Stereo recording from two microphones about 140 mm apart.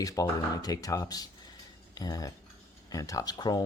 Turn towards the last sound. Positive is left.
turn(degrees=30)  # may be behind; listen again after turning